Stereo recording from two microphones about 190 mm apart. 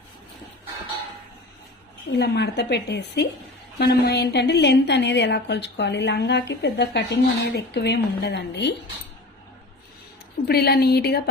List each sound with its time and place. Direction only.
2.0 s a woman's voice: 60° left (ahead or behind)
10.4 s a woman's voice: 55° left (ahead or behind)